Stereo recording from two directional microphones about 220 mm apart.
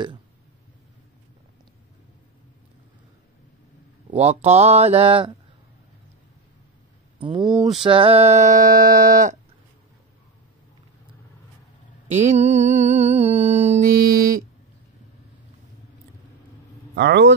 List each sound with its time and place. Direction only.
4.1 s speech: 30° right (ahead or behind)
7.2 s speech: 20° right (ahead or behind)
7.6 s a sound: 25° right (ahead or behind)
12.1 s music: 35° right (ahead or behind)
16.9 s speech: 50° right (ahead or behind)